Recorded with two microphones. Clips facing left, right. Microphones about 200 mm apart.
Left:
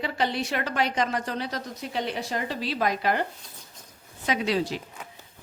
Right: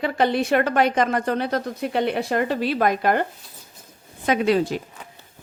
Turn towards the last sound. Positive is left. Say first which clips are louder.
# right 6 dB
turn(degrees=-50)  # may be behind; listen again after turning